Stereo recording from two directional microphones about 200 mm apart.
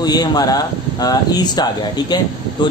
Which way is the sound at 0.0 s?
20° left (ahead or behind).